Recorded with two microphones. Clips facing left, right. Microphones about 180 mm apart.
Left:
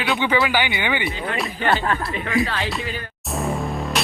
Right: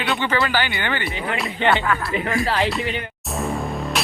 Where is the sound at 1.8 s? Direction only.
30° left (ahead or behind).